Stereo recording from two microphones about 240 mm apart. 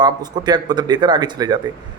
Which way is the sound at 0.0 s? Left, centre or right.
Centre.